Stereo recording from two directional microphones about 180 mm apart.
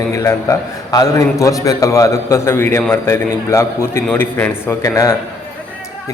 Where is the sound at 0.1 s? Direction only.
15° left (ahead or behind).